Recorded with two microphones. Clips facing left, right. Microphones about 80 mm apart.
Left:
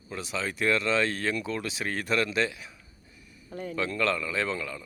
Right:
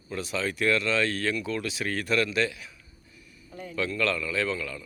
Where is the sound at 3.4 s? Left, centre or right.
Left.